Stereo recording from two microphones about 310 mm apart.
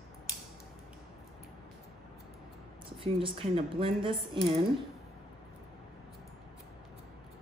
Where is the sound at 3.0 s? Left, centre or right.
Centre.